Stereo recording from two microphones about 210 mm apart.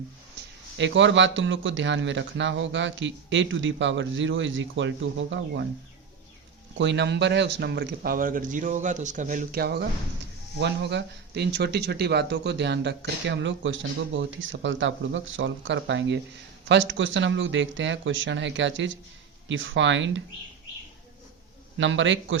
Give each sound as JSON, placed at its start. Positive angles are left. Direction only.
{"t": 0.8, "sound": "speech", "side_deg": -60}
{"t": 6.7, "sound": "speech", "side_deg": -55}
{"t": 21.8, "sound": "speech", "side_deg": -60}